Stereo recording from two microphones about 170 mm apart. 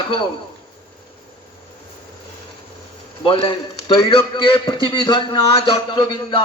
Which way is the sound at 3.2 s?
30° left (ahead or behind).